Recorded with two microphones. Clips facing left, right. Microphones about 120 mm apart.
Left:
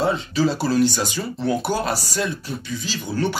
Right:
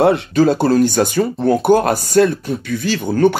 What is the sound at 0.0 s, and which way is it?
Speech, 60° right (ahead or behind).